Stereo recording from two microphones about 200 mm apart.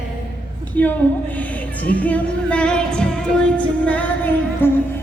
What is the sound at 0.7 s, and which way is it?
Speech, 10° left (ahead or behind).